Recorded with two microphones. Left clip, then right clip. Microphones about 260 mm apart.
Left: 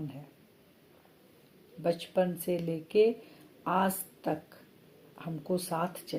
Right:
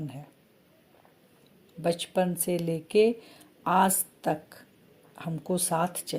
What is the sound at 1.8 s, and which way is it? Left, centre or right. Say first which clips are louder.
Speech: right 2 dB; right.